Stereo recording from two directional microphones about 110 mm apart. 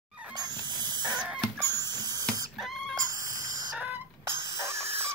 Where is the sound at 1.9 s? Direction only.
40° right (ahead or behind).